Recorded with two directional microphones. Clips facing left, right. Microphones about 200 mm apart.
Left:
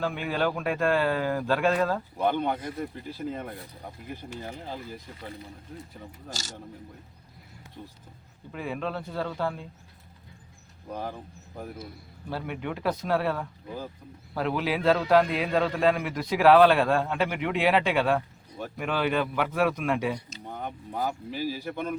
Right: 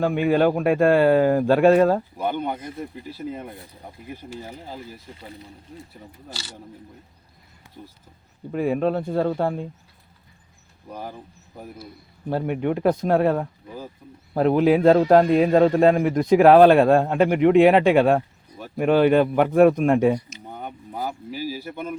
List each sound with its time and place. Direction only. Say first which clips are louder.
0.0 s a man's voice: right 9 dB; 50° right (ahead or behind)
2.1 s speech: even; 5° right (ahead or behind)
6.3 s speech: right 1 dB; 45° left (ahead or behind)
8.5 s a man's voice: right 11 dB; 50° right (ahead or behind)
12.5 s a man's voice: right 9 dB; 50° right (ahead or behind)
20.5 s speech: right 1 dB; 5° right (ahead or behind)